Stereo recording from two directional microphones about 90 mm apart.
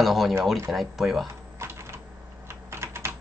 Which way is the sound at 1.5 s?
30° right (ahead or behind).